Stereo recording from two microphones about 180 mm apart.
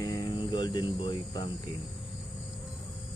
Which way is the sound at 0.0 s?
25° left (ahead or behind).